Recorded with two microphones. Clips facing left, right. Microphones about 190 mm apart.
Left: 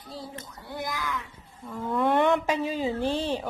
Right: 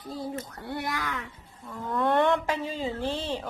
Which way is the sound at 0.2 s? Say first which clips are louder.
Right 7 dB; 65° right (ahead or behind).